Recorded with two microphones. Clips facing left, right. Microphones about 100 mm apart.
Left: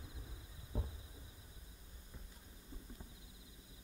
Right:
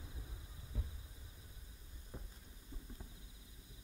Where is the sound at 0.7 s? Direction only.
35° left (ahead or behind).